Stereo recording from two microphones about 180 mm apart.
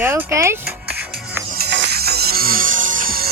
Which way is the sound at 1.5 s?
65° right (ahead or behind).